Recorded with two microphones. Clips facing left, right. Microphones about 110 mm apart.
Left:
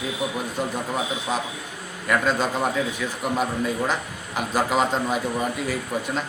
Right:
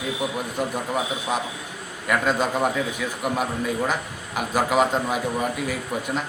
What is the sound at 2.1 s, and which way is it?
Speech, 10° right (ahead or behind).